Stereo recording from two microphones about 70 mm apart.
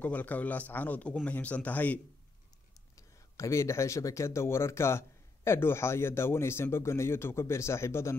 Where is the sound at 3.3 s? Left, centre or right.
Left.